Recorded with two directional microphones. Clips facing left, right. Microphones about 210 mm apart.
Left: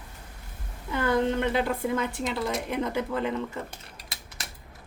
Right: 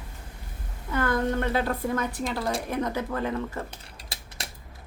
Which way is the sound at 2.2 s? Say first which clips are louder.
Even; 30° right (ahead or behind).